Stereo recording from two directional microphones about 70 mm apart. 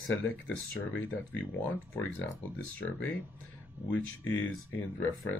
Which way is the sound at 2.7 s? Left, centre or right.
Left.